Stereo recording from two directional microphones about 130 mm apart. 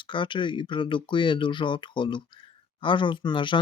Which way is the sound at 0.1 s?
40° left (ahead or behind).